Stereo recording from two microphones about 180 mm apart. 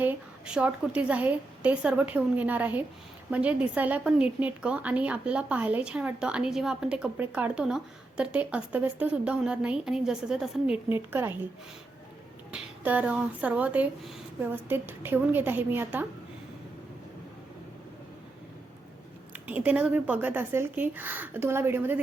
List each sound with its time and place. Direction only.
0.0 s a woman's voice: 5° right (ahead or behind)
12.5 s a woman's voice: 5° right (ahead or behind)
19.5 s a woman's voice: 10° right (ahead or behind)